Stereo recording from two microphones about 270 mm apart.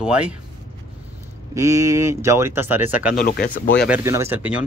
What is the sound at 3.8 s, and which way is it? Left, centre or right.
Speech, centre.